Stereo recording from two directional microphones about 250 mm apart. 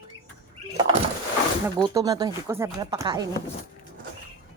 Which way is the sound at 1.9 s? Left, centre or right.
Centre.